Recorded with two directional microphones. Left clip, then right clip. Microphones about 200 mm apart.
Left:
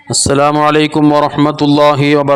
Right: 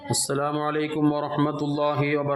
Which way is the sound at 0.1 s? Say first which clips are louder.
Left 15 dB; 40° left (ahead or behind).